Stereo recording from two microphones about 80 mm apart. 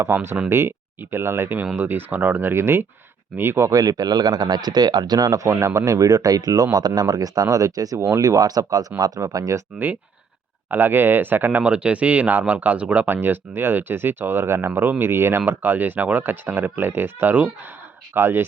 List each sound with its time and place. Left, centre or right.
0.0 s speech: right
3.7 s speech: right
9.7 s speech: right
13.1 s speech: right